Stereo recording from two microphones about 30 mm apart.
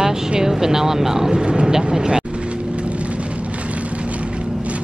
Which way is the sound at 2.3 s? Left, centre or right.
Right.